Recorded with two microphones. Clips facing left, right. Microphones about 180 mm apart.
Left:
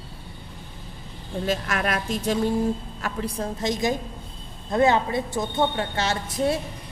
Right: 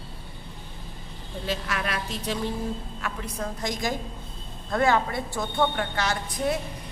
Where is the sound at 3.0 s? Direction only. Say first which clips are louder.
Left 5 dB; 30° left (ahead or behind).